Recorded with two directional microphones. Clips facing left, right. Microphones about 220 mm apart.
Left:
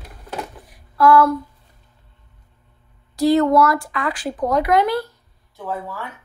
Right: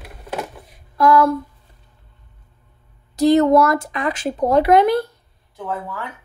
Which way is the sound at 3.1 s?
20° right (ahead or behind).